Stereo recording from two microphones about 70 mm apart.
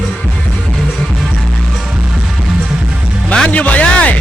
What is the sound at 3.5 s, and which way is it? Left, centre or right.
Music, left.